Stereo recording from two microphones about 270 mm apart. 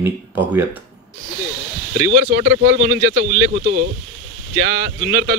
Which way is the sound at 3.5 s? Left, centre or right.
Right.